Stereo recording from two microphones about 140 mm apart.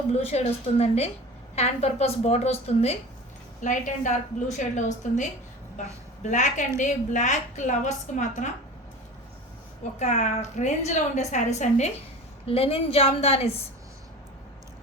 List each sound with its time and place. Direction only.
0.1 s a woman's voice: 50° left (ahead or behind)
3.6 s a woman's voice: 65° left (ahead or behind)
10.0 s a woman's voice: 60° left (ahead or behind)
12.5 s a woman's voice: 45° left (ahead or behind)